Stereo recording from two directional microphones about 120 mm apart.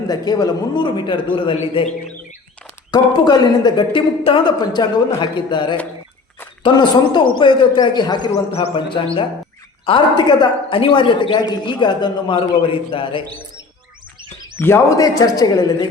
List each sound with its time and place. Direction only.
0.1 s a man's voice: 35° left (ahead or behind)
2.9 s speech: 35° left (ahead or behind)
8.5 s a man's voice: 50° left (ahead or behind)
14.6 s speech: 25° left (ahead or behind)